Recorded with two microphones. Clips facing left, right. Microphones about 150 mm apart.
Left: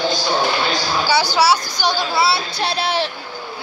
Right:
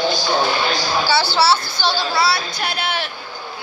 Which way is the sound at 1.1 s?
15° left (ahead or behind).